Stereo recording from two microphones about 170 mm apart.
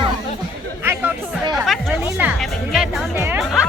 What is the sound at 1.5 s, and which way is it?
Music, centre (ahead or behind).